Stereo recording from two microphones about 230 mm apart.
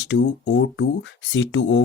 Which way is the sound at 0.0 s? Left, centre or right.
Left.